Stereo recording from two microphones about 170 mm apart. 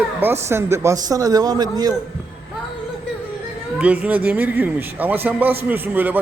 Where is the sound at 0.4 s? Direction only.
15° right (ahead or behind).